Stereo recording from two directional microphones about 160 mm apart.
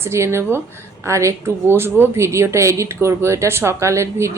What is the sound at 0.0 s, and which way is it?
A woman's voice, 15° right (ahead or behind).